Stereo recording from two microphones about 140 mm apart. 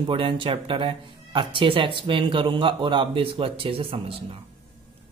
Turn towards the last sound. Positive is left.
turn(degrees=-40)  # may be behind; listen again after turning